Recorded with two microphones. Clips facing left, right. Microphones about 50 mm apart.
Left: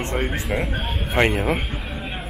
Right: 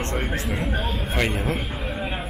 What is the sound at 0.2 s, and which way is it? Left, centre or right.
Speech, centre.